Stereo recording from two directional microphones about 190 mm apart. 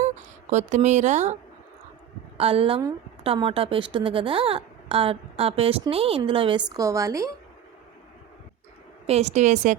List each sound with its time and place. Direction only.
0.0 s speech: 40° right (ahead or behind)
2.4 s a woman's voice: 30° right (ahead or behind)
9.0 s a woman's voice: 35° right (ahead or behind)